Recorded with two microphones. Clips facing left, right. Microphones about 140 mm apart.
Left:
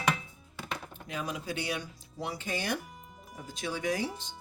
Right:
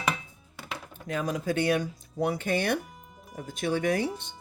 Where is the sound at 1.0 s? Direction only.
45° right (ahead or behind).